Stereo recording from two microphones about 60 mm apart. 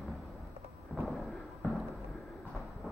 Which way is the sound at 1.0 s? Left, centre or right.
Centre.